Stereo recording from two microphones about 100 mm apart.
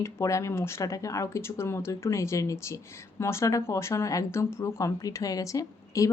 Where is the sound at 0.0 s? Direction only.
30° left (ahead or behind).